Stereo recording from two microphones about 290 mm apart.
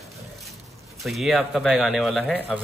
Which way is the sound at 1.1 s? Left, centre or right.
Centre.